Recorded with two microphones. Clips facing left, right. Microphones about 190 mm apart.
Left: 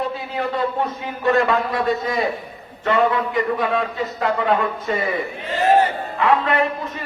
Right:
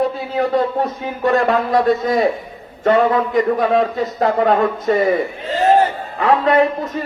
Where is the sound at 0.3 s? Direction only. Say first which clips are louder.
Right 5 dB; 45° right (ahead or behind).